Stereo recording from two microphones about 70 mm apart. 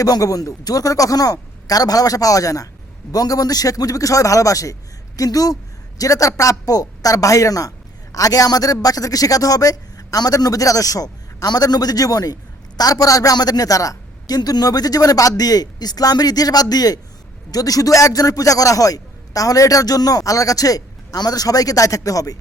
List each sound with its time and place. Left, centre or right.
0.0 s a man's voice: left